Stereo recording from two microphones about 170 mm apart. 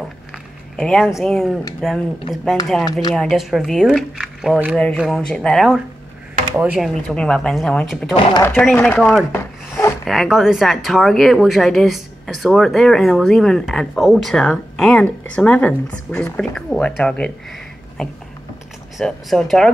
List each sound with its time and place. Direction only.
0.7 s speech: 5° left (ahead or behind)
2.8 s speech: 20° left (ahead or behind)
3.2 s speech: centre (ahead or behind)
8.3 s speech: 20° left (ahead or behind)
8.5 s chopping: 5° left (ahead or behind)
10.0 s speech: centre (ahead or behind)